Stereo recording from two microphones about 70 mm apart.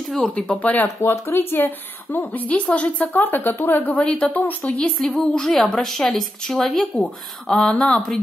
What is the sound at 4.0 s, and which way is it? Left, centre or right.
Speech, centre.